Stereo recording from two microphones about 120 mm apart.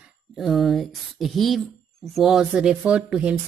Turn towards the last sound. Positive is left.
turn(degrees=-10)  # may be behind; listen again after turning